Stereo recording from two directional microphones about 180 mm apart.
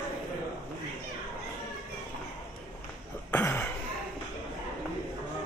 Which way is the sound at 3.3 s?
15° left (ahead or behind).